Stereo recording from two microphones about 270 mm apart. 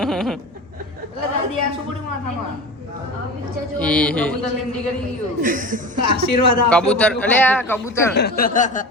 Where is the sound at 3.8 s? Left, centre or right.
Centre.